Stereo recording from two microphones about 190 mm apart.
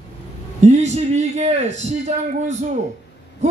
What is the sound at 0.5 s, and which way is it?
A man's voice, 35° right (ahead or behind).